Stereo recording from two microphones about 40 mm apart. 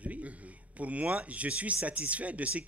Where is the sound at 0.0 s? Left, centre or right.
Right.